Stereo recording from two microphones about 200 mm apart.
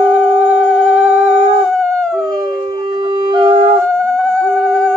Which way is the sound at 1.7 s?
5° left (ahead or behind).